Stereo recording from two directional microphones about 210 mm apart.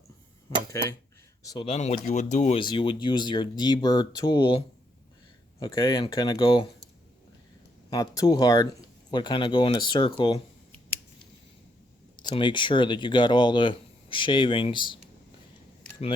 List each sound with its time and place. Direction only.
1.5 s speech: 25° left (ahead or behind)
7.9 s speech: 15° left (ahead or behind)
12.1 s speech: 20° left (ahead or behind)